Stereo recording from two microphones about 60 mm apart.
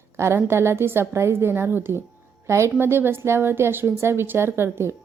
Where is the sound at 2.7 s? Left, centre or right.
Right.